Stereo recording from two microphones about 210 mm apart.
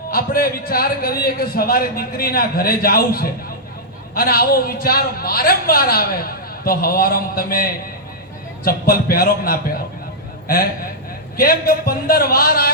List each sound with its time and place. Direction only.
0.1 s a man's voice: 45° left (ahead or behind)
11.3 s a man's voice: 45° left (ahead or behind)